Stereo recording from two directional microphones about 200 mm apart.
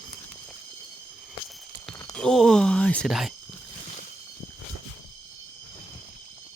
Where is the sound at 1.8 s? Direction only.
Centre (ahead or behind).